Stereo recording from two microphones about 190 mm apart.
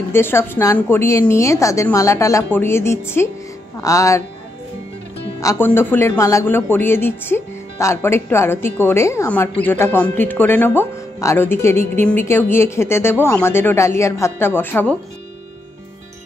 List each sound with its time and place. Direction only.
0.1 s speech: 10° left (ahead or behind)
5.4 s speech: 15° left (ahead or behind)